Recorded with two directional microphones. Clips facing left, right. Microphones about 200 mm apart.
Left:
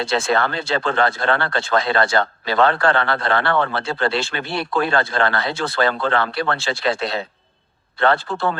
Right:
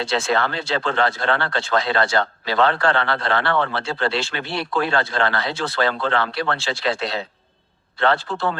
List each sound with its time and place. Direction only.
0.0 s speech: 50° left (ahead or behind)